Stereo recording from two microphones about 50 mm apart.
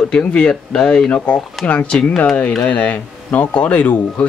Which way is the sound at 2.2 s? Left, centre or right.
Left.